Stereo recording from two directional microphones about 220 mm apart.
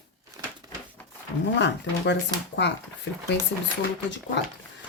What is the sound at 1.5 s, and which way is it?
Speech, 50° left (ahead or behind).